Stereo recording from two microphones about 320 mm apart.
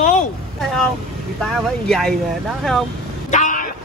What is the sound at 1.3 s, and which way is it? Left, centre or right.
Speech, centre.